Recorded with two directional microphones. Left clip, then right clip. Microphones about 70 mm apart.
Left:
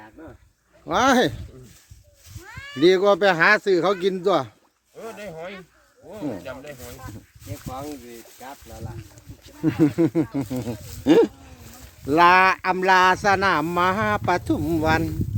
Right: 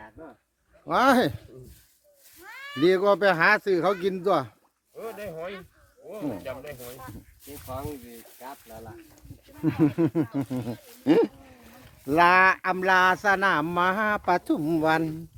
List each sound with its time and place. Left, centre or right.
0.9 s speech: centre
2.4 s speech: left
4.9 s a sound: centre
6.1 s speech: centre
9.6 s speech: left
9.8 s speech: centre
11.0 s a sound: left
12.4 s speech: left
14.6 s speech: centre